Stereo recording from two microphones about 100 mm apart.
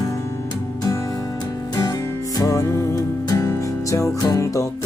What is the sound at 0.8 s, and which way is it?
Music, 35° left (ahead or behind).